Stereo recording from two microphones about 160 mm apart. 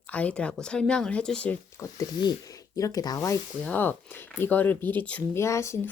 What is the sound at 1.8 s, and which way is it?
Speech, 25° left (ahead or behind).